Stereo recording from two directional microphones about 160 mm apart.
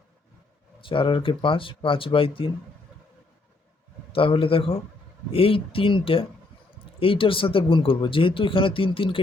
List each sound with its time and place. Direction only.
0.8 s speech: 30° left (ahead or behind)
4.1 s speech: 35° left (ahead or behind)